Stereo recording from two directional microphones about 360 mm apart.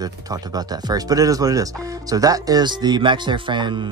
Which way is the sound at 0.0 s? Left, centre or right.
Centre.